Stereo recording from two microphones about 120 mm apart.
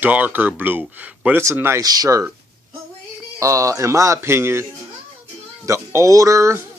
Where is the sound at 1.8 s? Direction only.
30° right (ahead or behind).